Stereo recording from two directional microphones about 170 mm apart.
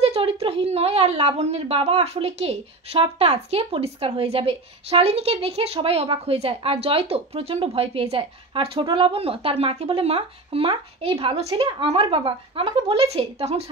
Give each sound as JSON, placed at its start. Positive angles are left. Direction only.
{"t": 0.0, "sound": "a woman's voice", "side_deg": -35}